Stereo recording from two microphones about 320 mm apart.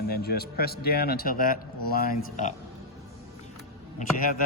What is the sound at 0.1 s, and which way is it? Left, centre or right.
A man's voice, left.